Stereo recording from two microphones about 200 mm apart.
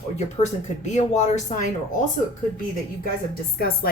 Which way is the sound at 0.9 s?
35° left (ahead or behind).